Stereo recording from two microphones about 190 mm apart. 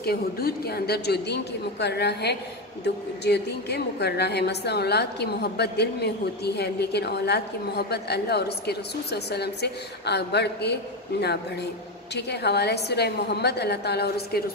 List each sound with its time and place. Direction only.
0.0 s a woman's voice: 55° left (ahead or behind)